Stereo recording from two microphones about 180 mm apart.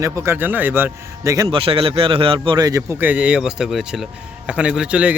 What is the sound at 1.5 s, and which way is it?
A man's voice, 30° right (ahead or behind).